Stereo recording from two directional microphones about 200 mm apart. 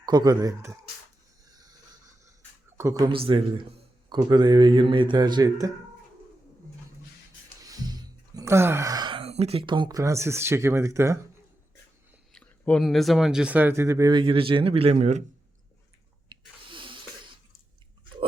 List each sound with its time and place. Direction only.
0.0 s speech: 20° right (ahead or behind)
1.5 s a sound: 20° right (ahead or behind)
2.7 s speech: 15° right (ahead or behind)
7.7 s speech: 20° right (ahead or behind)
12.3 s speech: 5° left (ahead or behind); by 15.2 s 35° right (ahead or behind)
16.3 s a sound: 25° right (ahead or behind)